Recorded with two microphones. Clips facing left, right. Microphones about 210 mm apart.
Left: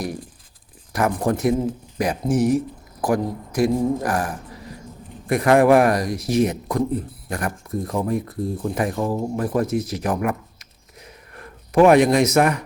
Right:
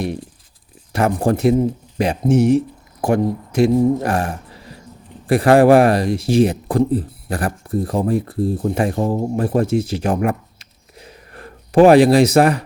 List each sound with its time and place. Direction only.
0.9 s speech: 30° right (ahead or behind)